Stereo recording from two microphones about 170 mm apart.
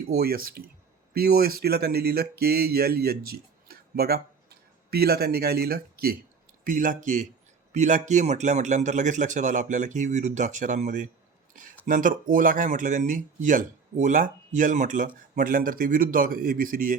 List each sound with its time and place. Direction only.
0.2 s speech: 60° right (ahead or behind)
6.7 s speech: 50° right (ahead or behind)